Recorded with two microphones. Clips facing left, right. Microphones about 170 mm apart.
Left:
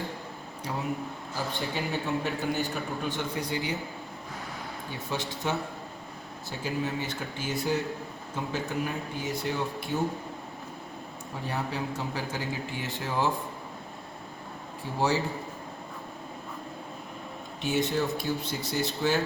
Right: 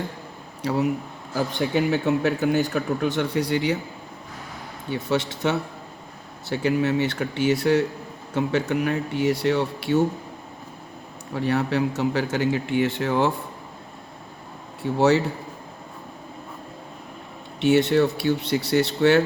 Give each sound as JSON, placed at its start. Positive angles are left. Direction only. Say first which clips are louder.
{"t": 0.6, "sound": "speech", "louder": "right 9 dB", "side_deg": -70}
{"t": 5.3, "sound": "speech", "louder": "right 6 dB", "side_deg": -75}
{"t": 11.3, "sound": "speech", "louder": "right 10 dB", "side_deg": -75}
{"t": 14.9, "sound": "speech", "louder": "right 8 dB", "side_deg": -70}
{"t": 17.8, "sound": "speech", "louder": "right 9 dB", "side_deg": -70}